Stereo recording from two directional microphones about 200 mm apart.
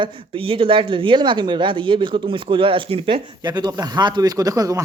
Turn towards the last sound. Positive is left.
turn(degrees=-15)  # may be behind; listen again after turning